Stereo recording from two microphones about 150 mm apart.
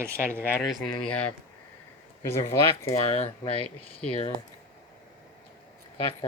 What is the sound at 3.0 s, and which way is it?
Speech, 45° left (ahead or behind).